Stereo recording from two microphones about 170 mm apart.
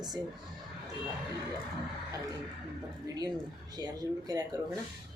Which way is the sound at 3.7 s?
25° right (ahead or behind).